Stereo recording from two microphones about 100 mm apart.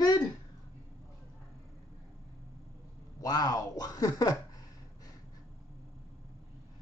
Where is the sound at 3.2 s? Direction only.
40° left (ahead or behind).